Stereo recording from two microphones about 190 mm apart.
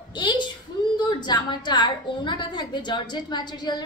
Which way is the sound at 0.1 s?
25° left (ahead or behind).